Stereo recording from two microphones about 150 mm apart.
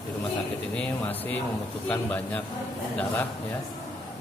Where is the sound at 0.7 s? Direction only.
10° left (ahead or behind).